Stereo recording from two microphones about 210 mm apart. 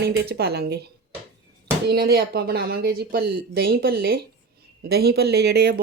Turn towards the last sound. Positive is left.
turn(degrees=-50)  # may be behind; listen again after turning